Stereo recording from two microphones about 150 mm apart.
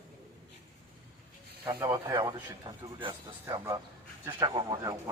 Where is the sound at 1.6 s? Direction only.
25° right (ahead or behind).